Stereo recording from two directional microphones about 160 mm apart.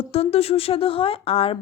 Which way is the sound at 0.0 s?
40° left (ahead or behind).